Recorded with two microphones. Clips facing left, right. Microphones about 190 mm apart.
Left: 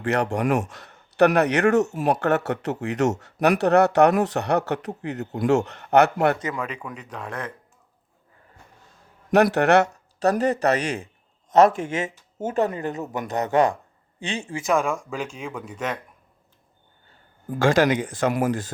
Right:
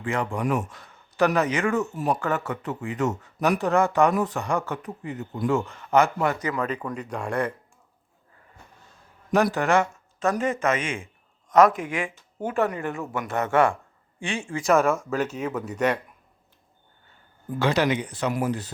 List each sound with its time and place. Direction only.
0.0 s speech: 75° left (ahead or behind)
7.1 s speech: 10° right (ahead or behind)
9.3 s speech: 65° left (ahead or behind)
9.8 s speech: 40° left (ahead or behind)
11.4 s speech: 25° left (ahead or behind)
14.6 s speech: 5° right (ahead or behind)
17.6 s speech: 45° left (ahead or behind)
18.3 s speech: 90° left